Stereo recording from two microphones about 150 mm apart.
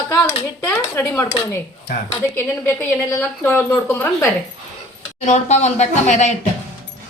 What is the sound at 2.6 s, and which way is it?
A woman's voice, 10° left (ahead or behind).